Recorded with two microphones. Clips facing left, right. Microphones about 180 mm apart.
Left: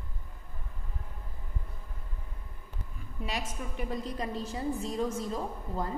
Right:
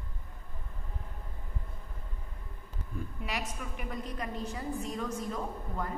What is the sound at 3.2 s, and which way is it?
A woman's voice, 25° left (ahead or behind).